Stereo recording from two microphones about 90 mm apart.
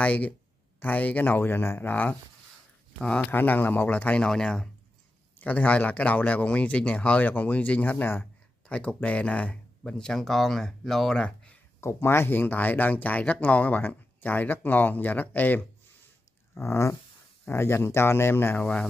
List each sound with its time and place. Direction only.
0.0 s speech: 15° left (ahead or behind)
3.3 s speech: 20° left (ahead or behind)
5.4 s speech: 15° left (ahead or behind)
11.8 s speech: 30° left (ahead or behind)
16.5 s a sound: 30° left (ahead or behind)
17.5 s speech: 25° left (ahead or behind)
18.6 s speech: 15° left (ahead or behind)